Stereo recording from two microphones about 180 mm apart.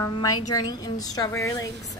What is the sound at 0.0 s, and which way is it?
A woman's voice, 20° left (ahead or behind).